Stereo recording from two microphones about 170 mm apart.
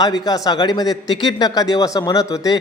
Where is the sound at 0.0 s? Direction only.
25° left (ahead or behind).